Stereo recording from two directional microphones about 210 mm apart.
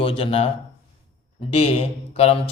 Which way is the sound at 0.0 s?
25° left (ahead or behind).